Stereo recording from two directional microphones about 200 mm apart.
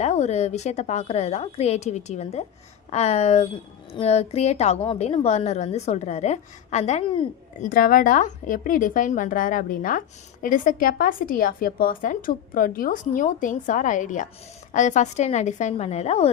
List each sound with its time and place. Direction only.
0.0 s a woman's voice: 35° left (ahead or behind)
7.7 s a woman's voice: 45° left (ahead or behind)